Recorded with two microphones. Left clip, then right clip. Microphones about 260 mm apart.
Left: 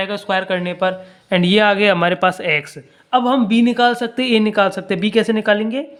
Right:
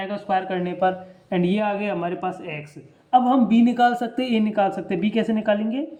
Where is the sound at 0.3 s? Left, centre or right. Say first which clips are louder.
Left 3 dB; centre.